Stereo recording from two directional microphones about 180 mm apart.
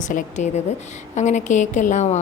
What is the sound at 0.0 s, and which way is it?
A woman's voice, 45° left (ahead or behind).